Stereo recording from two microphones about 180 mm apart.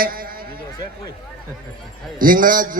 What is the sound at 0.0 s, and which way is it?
Sheep, 55° right (ahead or behind).